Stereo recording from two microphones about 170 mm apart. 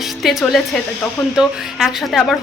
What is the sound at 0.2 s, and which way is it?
Speech, centre (ahead or behind).